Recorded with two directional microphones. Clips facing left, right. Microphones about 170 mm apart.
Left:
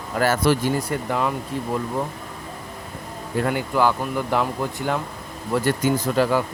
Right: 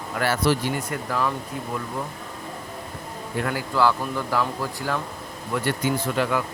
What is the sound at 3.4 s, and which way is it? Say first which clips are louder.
Speech: left 1 dB; 20° left (ahead or behind).